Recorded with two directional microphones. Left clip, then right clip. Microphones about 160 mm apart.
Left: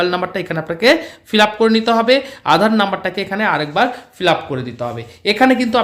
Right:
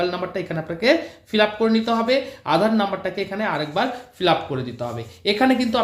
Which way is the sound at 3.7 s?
35° left (ahead or behind).